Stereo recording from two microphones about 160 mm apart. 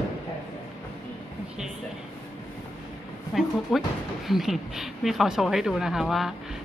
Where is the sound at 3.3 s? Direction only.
Centre (ahead or behind).